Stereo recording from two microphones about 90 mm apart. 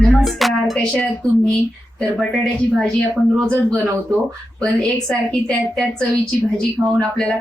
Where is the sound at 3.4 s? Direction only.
10° left (ahead or behind).